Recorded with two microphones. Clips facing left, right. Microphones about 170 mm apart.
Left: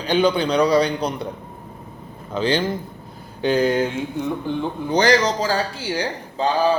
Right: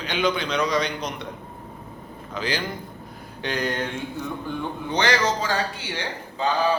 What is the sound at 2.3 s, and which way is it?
A man's voice, 30° left (ahead or behind).